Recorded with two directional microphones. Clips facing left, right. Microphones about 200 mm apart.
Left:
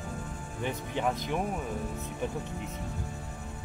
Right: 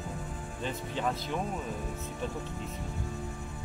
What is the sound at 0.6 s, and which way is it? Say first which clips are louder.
Cricket: left 2 dB; 15° left (ahead or behind).